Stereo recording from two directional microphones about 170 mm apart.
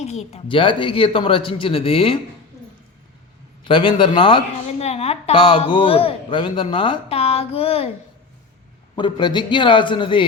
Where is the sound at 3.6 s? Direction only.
30° left (ahead or behind).